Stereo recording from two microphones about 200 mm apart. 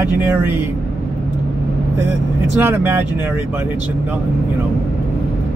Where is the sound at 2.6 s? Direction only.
10° right (ahead or behind).